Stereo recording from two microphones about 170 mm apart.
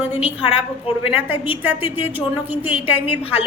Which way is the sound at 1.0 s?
10° right (ahead or behind).